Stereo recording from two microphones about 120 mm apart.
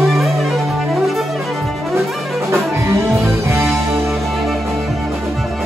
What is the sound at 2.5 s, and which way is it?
Music, 25° right (ahead or behind).